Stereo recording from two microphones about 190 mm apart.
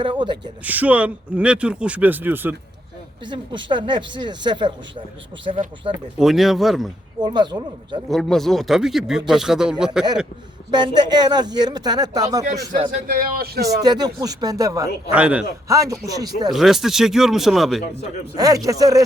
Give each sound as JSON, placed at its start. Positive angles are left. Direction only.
{"t": 0.0, "sound": "speech", "side_deg": -25}
{"t": 0.6, "sound": "speech", "side_deg": -10}
{"t": 3.2, "sound": "speech", "side_deg": -25}
{"t": 5.9, "sound": "speech", "side_deg": -5}
{"t": 7.2, "sound": "speech", "side_deg": -20}
{"t": 8.1, "sound": "speech", "side_deg": 0}
{"t": 10.7, "sound": "speech", "side_deg": -20}
{"t": 12.9, "sound": "speech", "side_deg": -50}
{"t": 13.8, "sound": "speech", "side_deg": -20}
{"t": 15.1, "sound": "speech", "side_deg": -5}
{"t": 16.5, "sound": "speech", "side_deg": 0}
{"t": 18.3, "sound": "speech", "side_deg": -20}